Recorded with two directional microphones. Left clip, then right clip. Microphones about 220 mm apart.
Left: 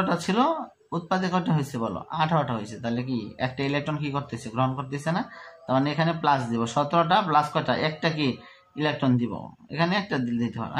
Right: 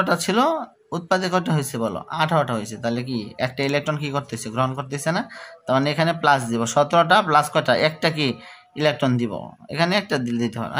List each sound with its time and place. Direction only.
0.0 s speech: 50° right (ahead or behind)